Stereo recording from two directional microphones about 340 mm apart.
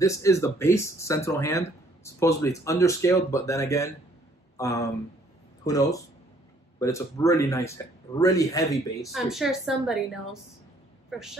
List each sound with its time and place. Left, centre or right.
0.0 s speech: centre
9.1 s a woman's voice: centre
11.1 s speech: centre